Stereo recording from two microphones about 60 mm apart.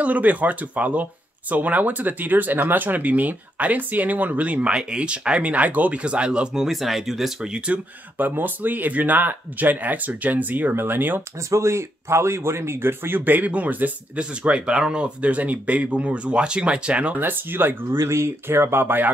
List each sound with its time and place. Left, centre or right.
0.0 s speech: right; by 7.3 s centre
7.5 s speech: centre
8.2 s speech: right
11.5 s speech: right
17.2 s speech: right
17.9 s speech: right